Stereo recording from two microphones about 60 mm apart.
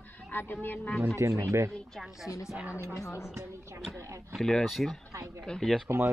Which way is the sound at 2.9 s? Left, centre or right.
Left.